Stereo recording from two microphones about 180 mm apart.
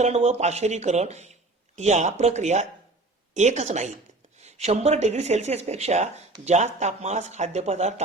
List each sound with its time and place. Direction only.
0.0 s speech: 40° right (ahead or behind)